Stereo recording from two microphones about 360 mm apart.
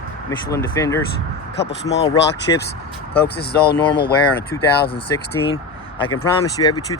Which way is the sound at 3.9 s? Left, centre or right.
Centre.